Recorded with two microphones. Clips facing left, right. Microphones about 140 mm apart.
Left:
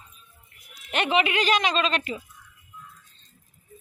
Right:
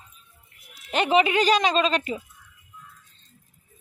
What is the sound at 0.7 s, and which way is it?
Speech, 30° right (ahead or behind).